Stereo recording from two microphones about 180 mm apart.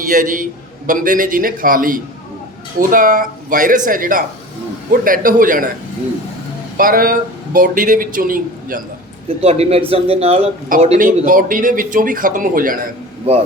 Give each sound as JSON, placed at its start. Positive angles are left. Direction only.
{"t": 0.1, "sound": "speech", "side_deg": -50}
{"t": 6.7, "sound": "speech", "side_deg": -50}
{"t": 9.4, "sound": "speech", "side_deg": -35}